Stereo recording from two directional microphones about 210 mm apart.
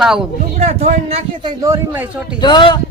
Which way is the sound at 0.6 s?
30° right (ahead or behind).